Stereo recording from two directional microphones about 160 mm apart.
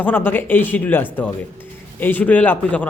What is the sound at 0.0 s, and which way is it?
A man's voice, 10° left (ahead or behind).